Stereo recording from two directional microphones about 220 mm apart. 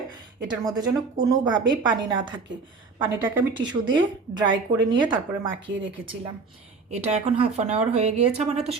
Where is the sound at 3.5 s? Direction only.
20° right (ahead or behind).